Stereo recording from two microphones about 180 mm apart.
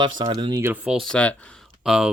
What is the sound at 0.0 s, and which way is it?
Speech, 25° right (ahead or behind).